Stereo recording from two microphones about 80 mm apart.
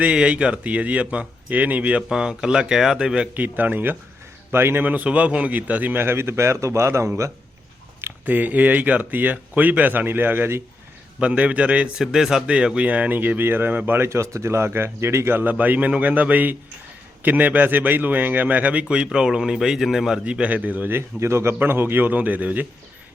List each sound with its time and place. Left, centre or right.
0.0 s a man's voice: centre
3.3 s a man's voice: right
8.2 s a man's voice: right
11.2 s a man's voice: centre
12.1 s a man's voice: centre